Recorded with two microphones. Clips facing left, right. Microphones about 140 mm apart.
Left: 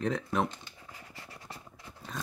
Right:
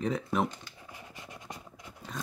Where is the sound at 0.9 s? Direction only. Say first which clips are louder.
Right 3 dB; 20° right (ahead or behind).